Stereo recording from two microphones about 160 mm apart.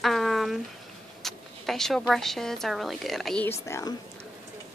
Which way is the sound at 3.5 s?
20° left (ahead or behind).